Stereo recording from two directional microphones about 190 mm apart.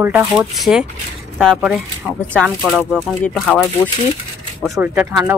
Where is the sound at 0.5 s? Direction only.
Centre (ahead or behind).